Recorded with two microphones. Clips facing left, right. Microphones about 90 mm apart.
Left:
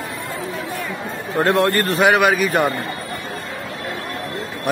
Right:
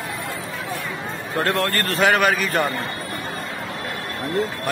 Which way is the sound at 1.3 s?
20° left (ahead or behind).